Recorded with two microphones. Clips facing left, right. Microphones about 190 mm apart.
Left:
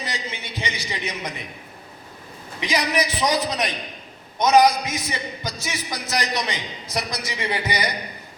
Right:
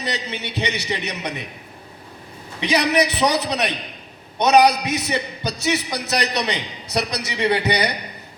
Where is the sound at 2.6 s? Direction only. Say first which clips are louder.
Right 5 dB; 65° right (ahead or behind).